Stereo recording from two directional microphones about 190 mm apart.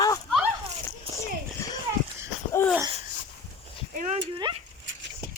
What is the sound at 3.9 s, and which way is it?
Speech, 45° right (ahead or behind).